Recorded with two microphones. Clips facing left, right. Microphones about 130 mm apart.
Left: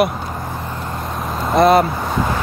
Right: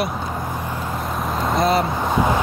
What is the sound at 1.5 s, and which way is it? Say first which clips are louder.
Speech: left 7 dB; 60° left (ahead or behind).